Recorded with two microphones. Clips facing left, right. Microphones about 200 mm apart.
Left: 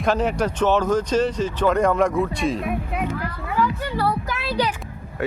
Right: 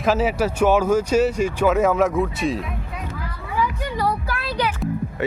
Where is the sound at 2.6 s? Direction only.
60° left (ahead or behind).